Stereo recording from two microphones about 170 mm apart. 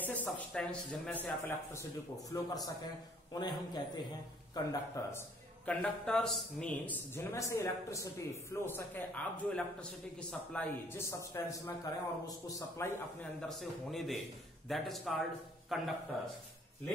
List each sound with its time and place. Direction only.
0.0 s a man's voice: 10° left (ahead or behind)
13.5 s a man's voice: centre (ahead or behind)